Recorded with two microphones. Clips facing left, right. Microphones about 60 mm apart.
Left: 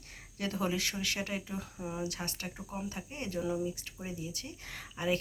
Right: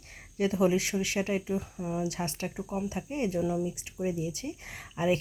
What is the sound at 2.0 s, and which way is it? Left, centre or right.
Speech, right.